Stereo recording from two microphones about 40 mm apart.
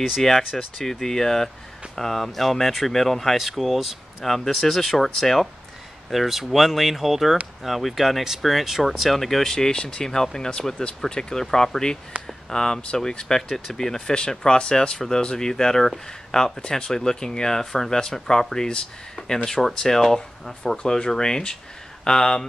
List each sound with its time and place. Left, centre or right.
0.2 s speech: centre
6.0 s speech: centre
9.1 s speech: centre